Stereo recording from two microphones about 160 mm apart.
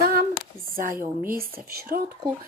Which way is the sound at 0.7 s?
60° right (ahead or behind).